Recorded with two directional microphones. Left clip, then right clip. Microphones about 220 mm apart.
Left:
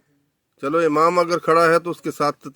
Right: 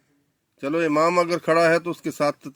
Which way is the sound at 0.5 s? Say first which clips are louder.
Left 3 dB; 45° left (ahead or behind).